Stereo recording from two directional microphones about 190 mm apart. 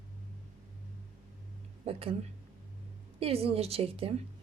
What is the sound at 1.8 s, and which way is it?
Speech, 30° right (ahead or behind).